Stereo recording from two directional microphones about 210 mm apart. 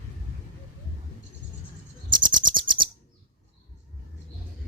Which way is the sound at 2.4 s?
20° right (ahead or behind).